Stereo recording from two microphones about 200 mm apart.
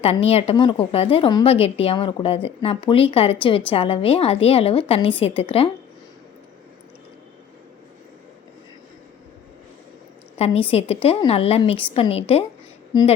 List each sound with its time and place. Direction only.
0.0 s a woman's voice: 30° left (ahead or behind)
10.3 s a woman's voice: 30° left (ahead or behind)